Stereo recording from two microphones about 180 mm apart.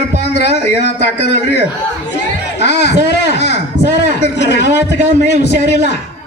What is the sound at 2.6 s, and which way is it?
A man's voice, 70° left (ahead or behind).